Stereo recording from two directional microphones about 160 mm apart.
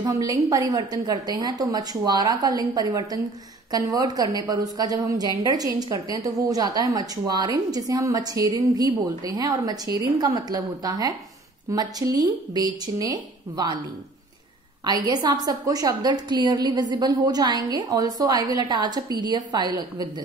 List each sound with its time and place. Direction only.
0.0 s a woman's voice: 20° right (ahead or behind)
14.9 s a woman's voice: 25° right (ahead or behind)